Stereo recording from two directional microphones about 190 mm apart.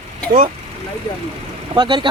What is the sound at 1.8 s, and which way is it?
Speech, 25° right (ahead or behind).